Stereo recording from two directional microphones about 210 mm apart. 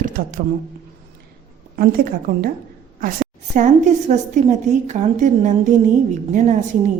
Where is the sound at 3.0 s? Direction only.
40° right (ahead or behind).